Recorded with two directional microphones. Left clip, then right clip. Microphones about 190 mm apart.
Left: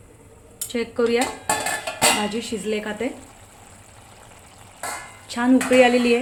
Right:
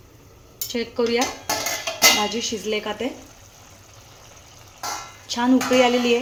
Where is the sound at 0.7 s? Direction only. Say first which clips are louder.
Left 1 dB; 10° left (ahead or behind).